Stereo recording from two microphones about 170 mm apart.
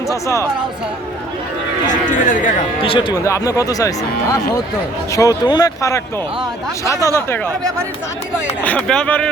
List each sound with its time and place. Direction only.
0.1 s speech: 15° left (ahead or behind)
1.9 s speech: 50° left (ahead or behind)
2.8 s speech: 30° left (ahead or behind)
3.2 s speech: 20° left (ahead or behind)
8.6 s speech: 5° left (ahead or behind)